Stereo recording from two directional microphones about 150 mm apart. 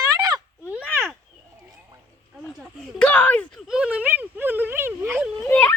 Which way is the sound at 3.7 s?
5° right (ahead or behind).